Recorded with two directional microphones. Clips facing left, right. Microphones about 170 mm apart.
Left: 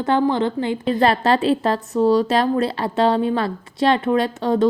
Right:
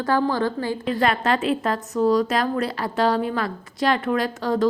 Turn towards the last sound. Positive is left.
turn(degrees=25)  # may be behind; listen again after turning